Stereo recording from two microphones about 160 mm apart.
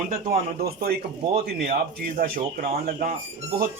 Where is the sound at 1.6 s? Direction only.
50° right (ahead or behind).